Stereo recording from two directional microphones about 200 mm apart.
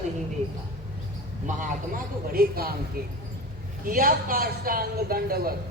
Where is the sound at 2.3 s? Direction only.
50° right (ahead or behind).